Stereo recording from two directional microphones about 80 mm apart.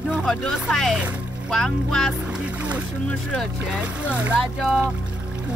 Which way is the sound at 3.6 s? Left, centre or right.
Centre.